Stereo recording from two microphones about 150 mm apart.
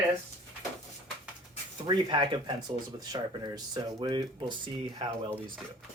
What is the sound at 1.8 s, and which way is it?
Speech, 30° right (ahead or behind).